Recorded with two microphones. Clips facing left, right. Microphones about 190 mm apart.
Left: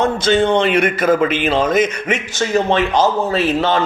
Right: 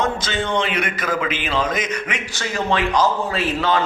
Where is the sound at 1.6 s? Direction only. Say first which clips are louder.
Left 9 dB; 50° left (ahead or behind).